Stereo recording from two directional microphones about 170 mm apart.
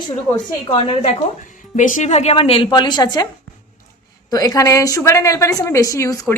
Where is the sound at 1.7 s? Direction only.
50° left (ahead or behind); by 3.2 s 25° left (ahead or behind).